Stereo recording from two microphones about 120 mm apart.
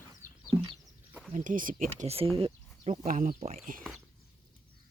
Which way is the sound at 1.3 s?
90° right.